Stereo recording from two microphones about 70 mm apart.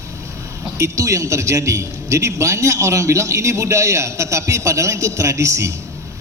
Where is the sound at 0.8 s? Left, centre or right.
Right.